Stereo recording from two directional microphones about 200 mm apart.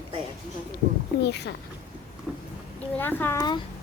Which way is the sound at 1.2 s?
55° left (ahead or behind).